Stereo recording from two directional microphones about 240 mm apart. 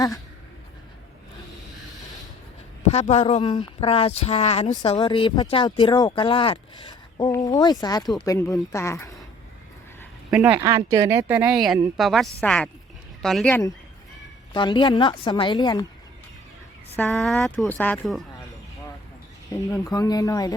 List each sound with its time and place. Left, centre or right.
2.9 s speech: left; by 9.1 s centre
10.3 s speech: centre
17.0 s speech: centre
19.5 s speech: centre